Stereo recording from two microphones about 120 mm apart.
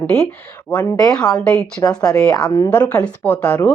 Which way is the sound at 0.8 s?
30° left (ahead or behind).